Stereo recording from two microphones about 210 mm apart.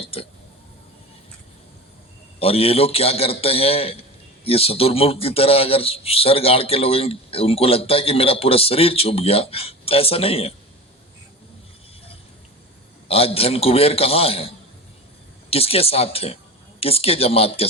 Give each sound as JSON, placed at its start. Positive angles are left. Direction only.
{"t": 0.0, "sound": "a man's voice", "side_deg": 25}
{"t": 2.4, "sound": "a man's voice", "side_deg": 30}
{"t": 13.1, "sound": "a man's voice", "side_deg": 25}